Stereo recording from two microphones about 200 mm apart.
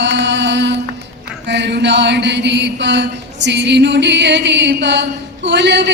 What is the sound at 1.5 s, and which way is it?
Mantra, 60° right (ahead or behind).